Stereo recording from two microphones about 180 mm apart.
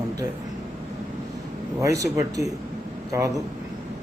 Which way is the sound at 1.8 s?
15° right (ahead or behind).